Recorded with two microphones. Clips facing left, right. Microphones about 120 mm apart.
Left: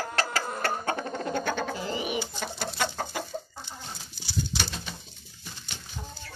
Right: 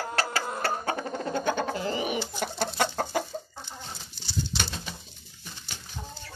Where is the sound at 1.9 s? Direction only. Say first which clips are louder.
Even; 40° right (ahead or behind).